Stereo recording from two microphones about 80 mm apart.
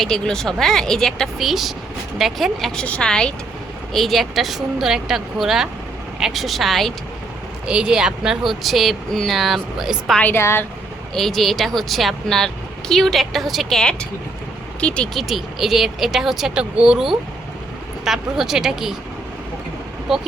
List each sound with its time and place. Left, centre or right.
0.0 s speech: centre
2.7 s speech: centre
7.7 s speech: centre
10.3 s speech: left
11.1 s speech: centre
15.1 s speech: centre
20.1 s speech: centre